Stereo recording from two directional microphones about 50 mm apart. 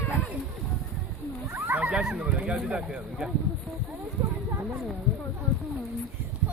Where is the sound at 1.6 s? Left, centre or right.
Right.